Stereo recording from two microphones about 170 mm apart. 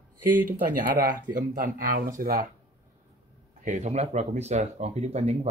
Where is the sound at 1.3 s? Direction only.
55° right (ahead or behind).